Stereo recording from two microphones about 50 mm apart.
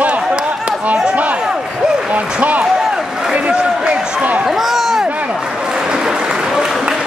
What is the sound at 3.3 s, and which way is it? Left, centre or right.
A man's voice, right.